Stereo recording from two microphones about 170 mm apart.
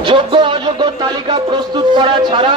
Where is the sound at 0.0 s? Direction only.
30° right (ahead or behind).